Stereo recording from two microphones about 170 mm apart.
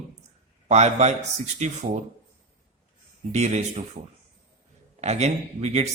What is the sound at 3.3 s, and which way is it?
Speech, 40° right (ahead or behind).